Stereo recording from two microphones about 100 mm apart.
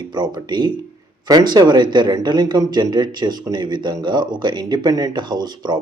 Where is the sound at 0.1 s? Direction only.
45° right (ahead or behind).